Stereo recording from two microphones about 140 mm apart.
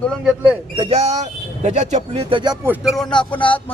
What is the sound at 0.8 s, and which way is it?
Speech, 50° right (ahead or behind).